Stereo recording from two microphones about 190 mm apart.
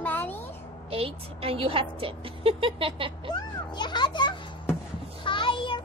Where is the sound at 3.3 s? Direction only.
25° left (ahead or behind).